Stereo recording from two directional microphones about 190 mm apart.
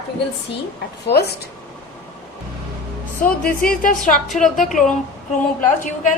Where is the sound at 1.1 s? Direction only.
55° left (ahead or behind).